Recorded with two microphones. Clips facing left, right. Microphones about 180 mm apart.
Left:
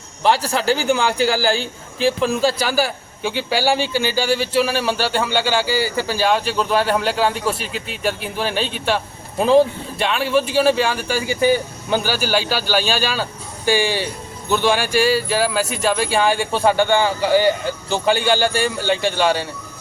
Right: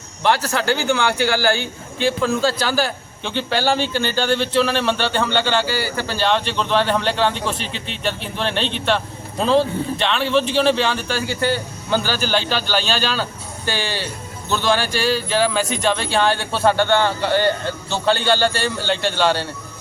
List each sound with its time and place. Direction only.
0.5 s speech: 35° left (ahead or behind)
2.2 s a man's voice: 15° left (ahead or behind)